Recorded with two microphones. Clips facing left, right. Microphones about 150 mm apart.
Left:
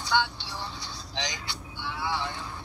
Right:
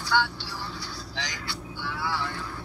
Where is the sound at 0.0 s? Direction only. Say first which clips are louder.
Right 1 dB; 20° left (ahead or behind).